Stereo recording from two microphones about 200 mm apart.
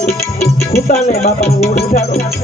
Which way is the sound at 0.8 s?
35° left (ahead or behind).